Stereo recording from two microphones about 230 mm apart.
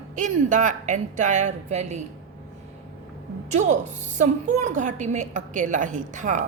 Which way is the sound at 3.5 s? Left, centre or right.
Right.